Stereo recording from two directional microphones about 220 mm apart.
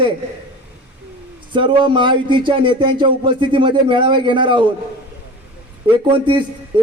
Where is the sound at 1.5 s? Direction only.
20° right (ahead or behind).